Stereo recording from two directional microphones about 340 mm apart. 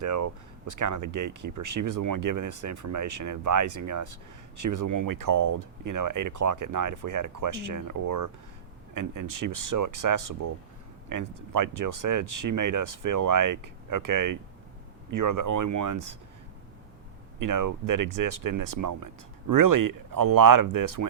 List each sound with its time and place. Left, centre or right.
0.0 s speech: right
17.4 s speech: right